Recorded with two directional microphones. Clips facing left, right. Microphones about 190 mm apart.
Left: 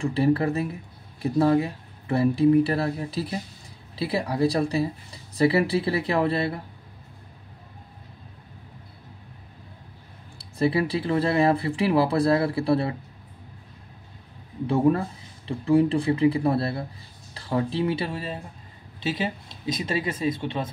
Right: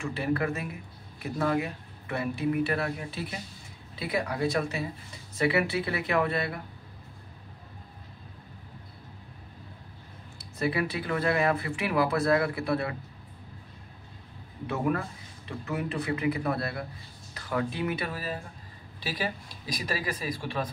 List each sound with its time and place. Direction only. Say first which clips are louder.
0.0 s speech: left 7 dB; 30° left (ahead or behind)
10.6 s speech: left 6 dB; 30° left (ahead or behind)
14.7 s speech: left 8 dB; 30° left (ahead or behind)